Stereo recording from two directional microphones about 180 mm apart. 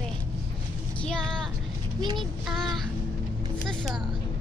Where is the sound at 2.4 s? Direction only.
Centre (ahead or behind).